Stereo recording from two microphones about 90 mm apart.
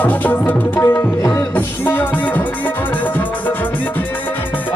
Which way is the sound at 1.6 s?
20° left (ahead or behind).